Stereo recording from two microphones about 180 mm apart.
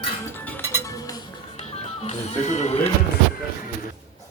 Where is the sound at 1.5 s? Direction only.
40° left (ahead or behind).